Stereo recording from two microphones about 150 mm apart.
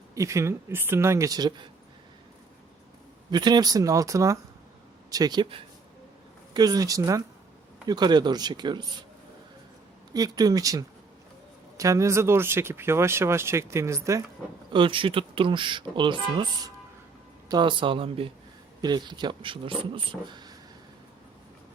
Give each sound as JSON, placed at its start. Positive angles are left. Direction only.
{"t": 0.1, "sound": "speech", "side_deg": -20}
{"t": 3.3, "sound": "speech", "side_deg": -30}
{"t": 10.1, "sound": "speech", "side_deg": -25}
{"t": 14.7, "sound": "speech", "side_deg": -35}